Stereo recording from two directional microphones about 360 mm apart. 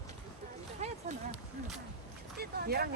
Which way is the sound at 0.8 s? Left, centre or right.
Centre.